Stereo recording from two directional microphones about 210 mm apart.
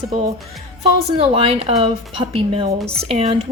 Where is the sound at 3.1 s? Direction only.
30° right (ahead or behind).